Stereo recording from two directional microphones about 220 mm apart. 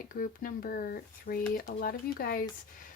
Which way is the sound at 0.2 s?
40° left (ahead or behind).